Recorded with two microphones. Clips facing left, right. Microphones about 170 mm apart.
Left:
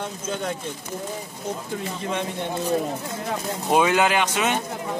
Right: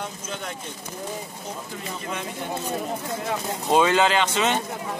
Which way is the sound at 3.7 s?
10° left (ahead or behind).